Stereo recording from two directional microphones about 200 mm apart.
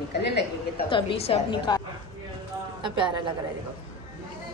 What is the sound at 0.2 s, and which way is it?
Speech, 55° left (ahead or behind).